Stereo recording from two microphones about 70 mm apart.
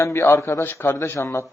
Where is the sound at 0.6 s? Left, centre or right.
Left.